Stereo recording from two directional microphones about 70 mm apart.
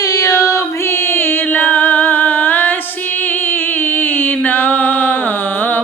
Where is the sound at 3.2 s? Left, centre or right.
Left.